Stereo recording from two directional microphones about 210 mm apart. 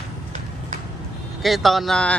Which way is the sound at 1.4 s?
Centre (ahead or behind).